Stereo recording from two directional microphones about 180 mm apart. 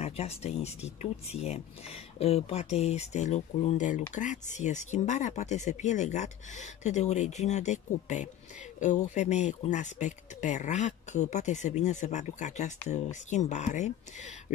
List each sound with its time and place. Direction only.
0.0 s speech: 35° left (ahead or behind)